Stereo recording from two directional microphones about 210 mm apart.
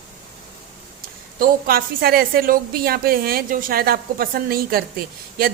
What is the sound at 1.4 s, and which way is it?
A woman's voice, 45° right (ahead or behind).